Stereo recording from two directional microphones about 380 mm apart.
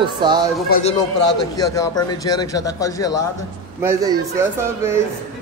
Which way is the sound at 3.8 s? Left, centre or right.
Centre.